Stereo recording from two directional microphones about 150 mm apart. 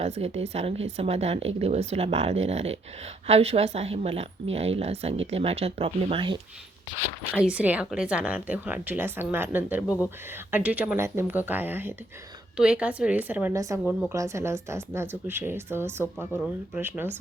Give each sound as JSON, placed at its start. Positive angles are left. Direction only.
{"t": 0.0, "sound": "speech", "side_deg": -45}
{"t": 7.3, "sound": "speech", "side_deg": -5}